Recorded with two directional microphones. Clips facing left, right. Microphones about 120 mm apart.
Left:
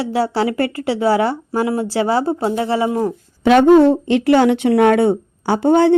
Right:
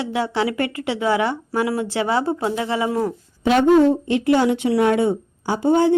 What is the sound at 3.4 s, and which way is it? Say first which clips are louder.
Speech: left 5 dB; 65° left (ahead or behind).